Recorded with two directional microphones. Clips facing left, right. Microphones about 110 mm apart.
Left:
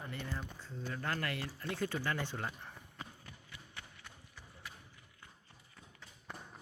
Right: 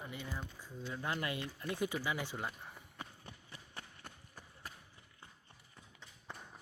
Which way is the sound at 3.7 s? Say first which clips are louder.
Right 3 dB; 45° right (ahead or behind).